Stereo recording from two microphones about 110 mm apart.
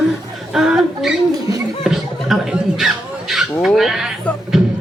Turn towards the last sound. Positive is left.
turn(degrees=-5)  # may be behind; listen again after turning